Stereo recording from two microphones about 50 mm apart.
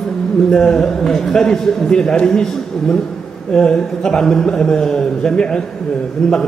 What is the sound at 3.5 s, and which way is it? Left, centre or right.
A man's voice, centre.